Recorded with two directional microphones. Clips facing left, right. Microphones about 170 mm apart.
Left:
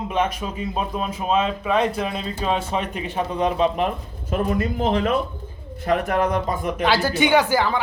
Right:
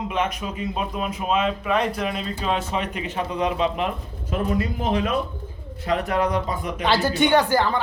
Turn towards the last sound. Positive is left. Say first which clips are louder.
# even
turn(degrees=10)  # may be behind; listen again after turning